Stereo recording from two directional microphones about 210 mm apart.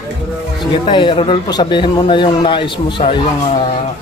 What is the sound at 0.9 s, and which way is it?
A man's voice, 25° left (ahead or behind).